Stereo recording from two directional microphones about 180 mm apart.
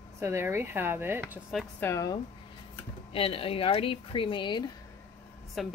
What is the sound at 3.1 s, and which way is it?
A woman's voice, 30° left (ahead or behind).